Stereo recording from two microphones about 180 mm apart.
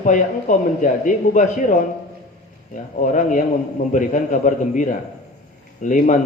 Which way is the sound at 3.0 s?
45° left (ahead or behind).